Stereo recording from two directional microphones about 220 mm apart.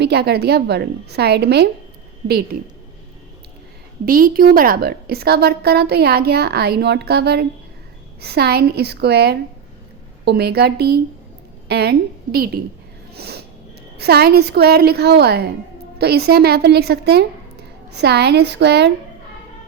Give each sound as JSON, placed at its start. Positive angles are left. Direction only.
{"t": 0.0, "sound": "a woman's voice", "side_deg": -45}
{"t": 4.0, "sound": "a woman's voice", "side_deg": -40}
{"t": 13.1, "sound": "snort", "side_deg": -45}
{"t": 14.0, "sound": "a woman's voice", "side_deg": -45}